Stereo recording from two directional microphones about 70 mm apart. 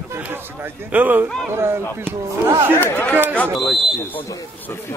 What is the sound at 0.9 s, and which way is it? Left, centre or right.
Speech, right.